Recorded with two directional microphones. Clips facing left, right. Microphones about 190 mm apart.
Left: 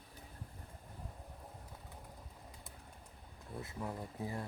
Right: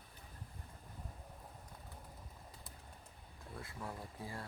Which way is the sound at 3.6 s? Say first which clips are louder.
Left 4 dB; 20° left (ahead or behind).